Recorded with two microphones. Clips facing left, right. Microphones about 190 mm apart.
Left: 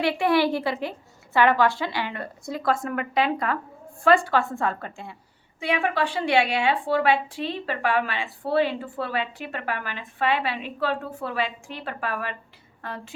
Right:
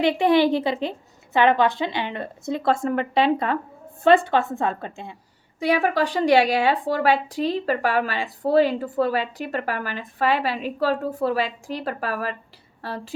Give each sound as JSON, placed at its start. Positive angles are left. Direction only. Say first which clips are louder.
{"t": 0.0, "sound": "a woman's voice", "louder": "right 4 dB", "side_deg": -20}
{"t": 5.5, "sound": "speech", "louder": "right 4 dB", "side_deg": -40}